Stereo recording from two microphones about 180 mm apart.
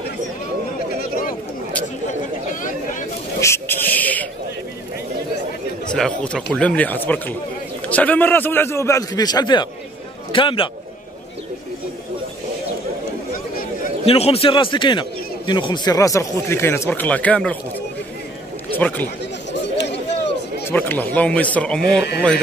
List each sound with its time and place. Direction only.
2.6 s a sound: 45° left (ahead or behind)
3.3 s a sound: 15° left (ahead or behind)
5.9 s a man's voice: 5° left (ahead or behind); by 10.7 s 30° left (ahead or behind)
14.0 s a man's voice: 35° left (ahead or behind); by 17.6 s 5° left (ahead or behind)
18.7 s a man's voice: 10° left (ahead or behind)
20.6 s a man's voice: 10° left (ahead or behind)